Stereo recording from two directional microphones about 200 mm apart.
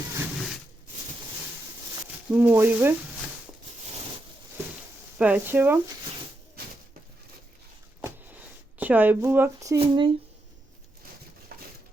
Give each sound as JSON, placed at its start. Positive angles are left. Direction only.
{"t": 2.3, "sound": "speech", "side_deg": -10}
{"t": 5.1, "sound": "speech", "side_deg": -5}
{"t": 8.0, "sound": "a sound", "side_deg": -10}
{"t": 9.7, "sound": "speech", "side_deg": -25}